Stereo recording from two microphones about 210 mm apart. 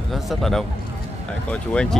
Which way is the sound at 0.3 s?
Centre (ahead or behind).